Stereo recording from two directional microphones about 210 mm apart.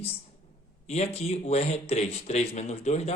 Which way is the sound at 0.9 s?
30° left (ahead or behind).